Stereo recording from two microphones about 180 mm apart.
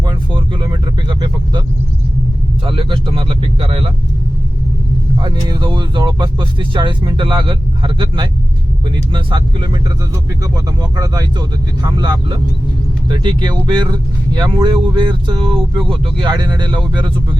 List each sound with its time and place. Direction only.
0.0 s vehicle: 25° right (ahead or behind)
2.6 s speech: 30° right (ahead or behind)
5.2 s speech: 25° right (ahead or behind)